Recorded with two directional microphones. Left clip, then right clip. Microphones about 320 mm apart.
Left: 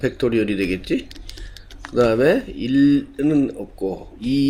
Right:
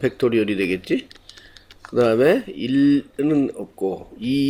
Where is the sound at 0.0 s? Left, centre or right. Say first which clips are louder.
Right 1 dB; right.